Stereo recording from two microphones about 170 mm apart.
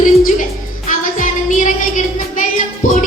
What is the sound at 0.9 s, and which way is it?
Child singing, 50° left (ahead or behind).